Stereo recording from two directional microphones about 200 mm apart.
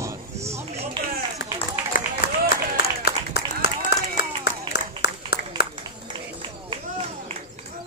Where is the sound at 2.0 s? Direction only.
45° left (ahead or behind).